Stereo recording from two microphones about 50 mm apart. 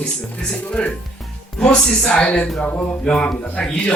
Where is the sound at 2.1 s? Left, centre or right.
Left.